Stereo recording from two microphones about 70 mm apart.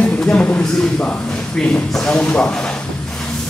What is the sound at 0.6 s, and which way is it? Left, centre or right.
Speech, centre.